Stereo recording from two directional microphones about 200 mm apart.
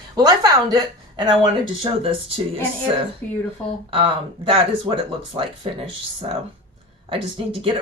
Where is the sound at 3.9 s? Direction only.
25° right (ahead or behind).